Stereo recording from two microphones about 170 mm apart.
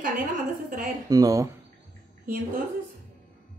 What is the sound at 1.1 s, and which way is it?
Speech, 20° right (ahead or behind).